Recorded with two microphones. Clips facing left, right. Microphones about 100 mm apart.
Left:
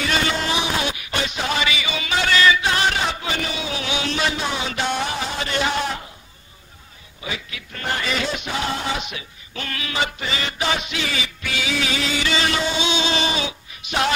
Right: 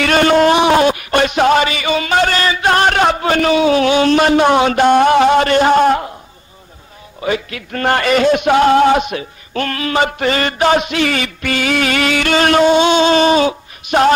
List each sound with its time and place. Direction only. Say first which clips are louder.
0.0 s music: right 12 dB; 55° right (ahead or behind)
7.2 s speech: right 13 dB; 55° right (ahead or behind)